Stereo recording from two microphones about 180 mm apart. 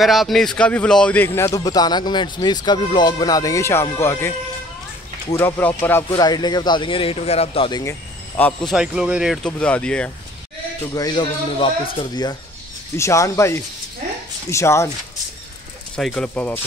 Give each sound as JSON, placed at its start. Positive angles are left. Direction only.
{"t": 0.0, "sound": "speech", "side_deg": 0}
{"t": 5.3, "sound": "speech", "side_deg": 10}
{"t": 8.4, "sound": "speech", "side_deg": 10}
{"t": 8.7, "sound": "speech", "side_deg": -5}
{"t": 10.8, "sound": "speech", "side_deg": 20}
{"t": 16.0, "sound": "speech", "side_deg": 5}